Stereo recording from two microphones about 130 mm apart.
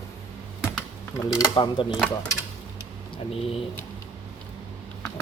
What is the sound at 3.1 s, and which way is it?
Speech, 50° left (ahead or behind).